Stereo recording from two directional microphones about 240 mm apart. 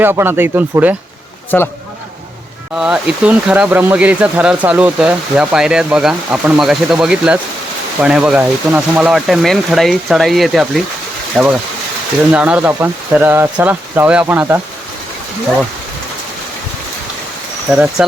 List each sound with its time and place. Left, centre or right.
0.0 s speech: centre
1.5 s speech: centre
2.7 s speech: centre